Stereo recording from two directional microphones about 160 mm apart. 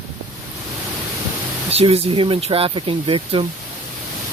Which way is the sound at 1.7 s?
40° right (ahead or behind).